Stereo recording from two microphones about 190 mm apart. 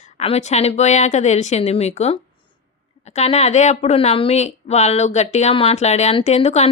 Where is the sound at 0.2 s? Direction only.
35° left (ahead or behind).